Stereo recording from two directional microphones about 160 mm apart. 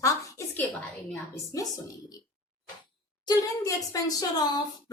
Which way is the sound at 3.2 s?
20° left (ahead or behind).